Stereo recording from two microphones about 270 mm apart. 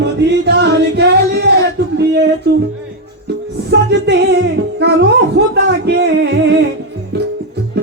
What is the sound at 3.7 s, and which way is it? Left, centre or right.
Music, right.